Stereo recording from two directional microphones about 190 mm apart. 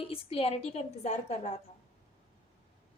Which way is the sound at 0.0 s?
30° left (ahead or behind).